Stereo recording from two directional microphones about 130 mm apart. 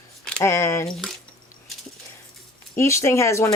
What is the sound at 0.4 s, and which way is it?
Speech, 20° left (ahead or behind).